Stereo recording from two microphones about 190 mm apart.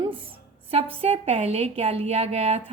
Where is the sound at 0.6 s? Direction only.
30° right (ahead or behind).